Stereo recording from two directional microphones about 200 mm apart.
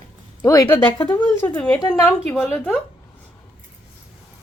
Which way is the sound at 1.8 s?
20° left (ahead or behind).